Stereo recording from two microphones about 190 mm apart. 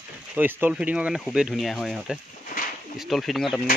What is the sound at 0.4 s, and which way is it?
Speech, 10° right (ahead or behind).